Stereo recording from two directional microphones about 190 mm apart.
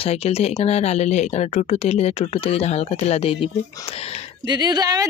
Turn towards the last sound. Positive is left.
turn(degrees=-20)  # may be behind; listen again after turning